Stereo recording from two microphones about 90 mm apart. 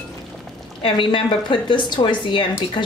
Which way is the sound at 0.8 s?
65° left (ahead or behind).